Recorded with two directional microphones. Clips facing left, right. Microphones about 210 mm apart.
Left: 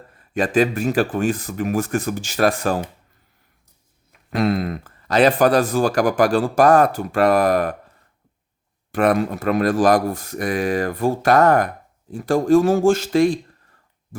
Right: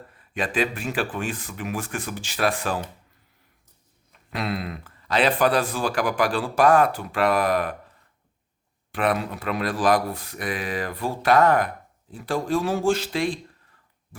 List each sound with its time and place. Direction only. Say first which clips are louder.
0.2 s speech: left 7 dB; 45° left (ahead or behind)
4.3 s speech: left 9 dB; 45° left (ahead or behind)
8.9 s speech: left 6 dB; 45° left (ahead or behind)